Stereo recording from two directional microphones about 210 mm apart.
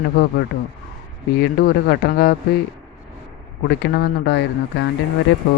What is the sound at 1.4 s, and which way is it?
Speech, 50° left (ahead or behind).